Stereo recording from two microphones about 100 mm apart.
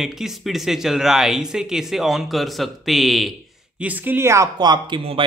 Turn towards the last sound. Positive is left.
turn(degrees=-50)  # may be behind; listen again after turning